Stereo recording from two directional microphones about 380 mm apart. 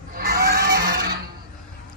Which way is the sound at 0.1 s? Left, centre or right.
Right.